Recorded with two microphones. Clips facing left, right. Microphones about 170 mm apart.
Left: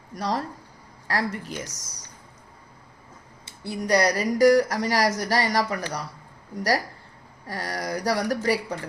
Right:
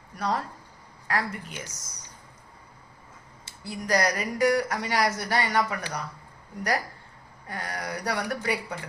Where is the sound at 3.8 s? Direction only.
35° left (ahead or behind).